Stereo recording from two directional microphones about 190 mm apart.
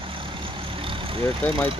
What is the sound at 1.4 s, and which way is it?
Speech, 10° left (ahead or behind).